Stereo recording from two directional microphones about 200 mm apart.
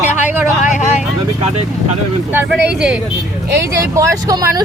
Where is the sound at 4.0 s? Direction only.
15° right (ahead or behind).